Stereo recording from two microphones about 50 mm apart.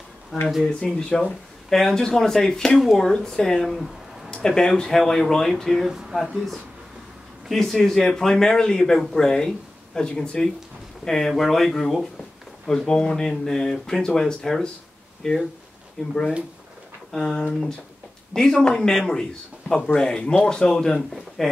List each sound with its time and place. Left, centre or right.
0.3 s speech: centre
0.7 s speech: centre
4.3 s speech: centre
5.9 s speech: centre
6.3 s speech: centre
17.2 s speech: centre